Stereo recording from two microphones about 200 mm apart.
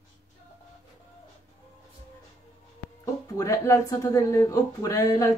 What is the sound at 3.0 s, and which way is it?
Speech, 15° left (ahead or behind).